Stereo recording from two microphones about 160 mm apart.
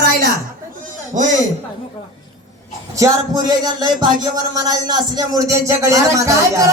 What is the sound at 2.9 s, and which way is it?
Speech, 20° right (ahead or behind).